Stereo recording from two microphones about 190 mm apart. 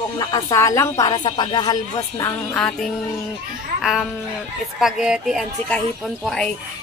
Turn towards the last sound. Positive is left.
turn(degrees=0)  # may be behind; listen again after turning